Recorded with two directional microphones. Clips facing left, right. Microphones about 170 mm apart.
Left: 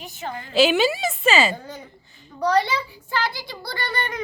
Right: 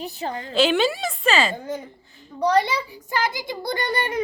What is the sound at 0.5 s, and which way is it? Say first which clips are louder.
A woman's voice: left 2 dB; 10° left (ahead or behind).